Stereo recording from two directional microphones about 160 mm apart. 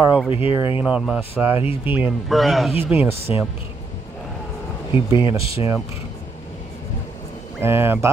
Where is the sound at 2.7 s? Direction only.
10° right (ahead or behind).